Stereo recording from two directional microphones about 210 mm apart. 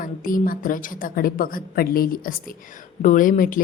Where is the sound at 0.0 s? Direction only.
40° left (ahead or behind).